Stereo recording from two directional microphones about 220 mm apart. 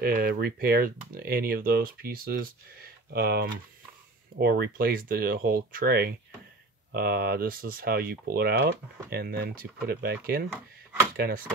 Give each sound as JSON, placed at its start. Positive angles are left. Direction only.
{"t": 0.0, "sound": "speech", "side_deg": -45}